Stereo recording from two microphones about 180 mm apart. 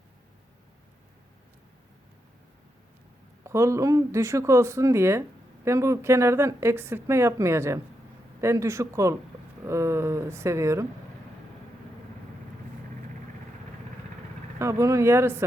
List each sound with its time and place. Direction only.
3.4 s speech: 15° right (ahead or behind)
14.6 s speech: 15° right (ahead or behind)